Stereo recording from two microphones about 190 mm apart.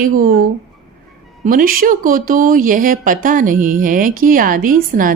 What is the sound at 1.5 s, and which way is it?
Speech, 50° right (ahead or behind).